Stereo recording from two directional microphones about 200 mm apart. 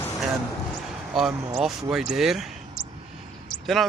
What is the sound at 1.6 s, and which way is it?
Speech, centre (ahead or behind).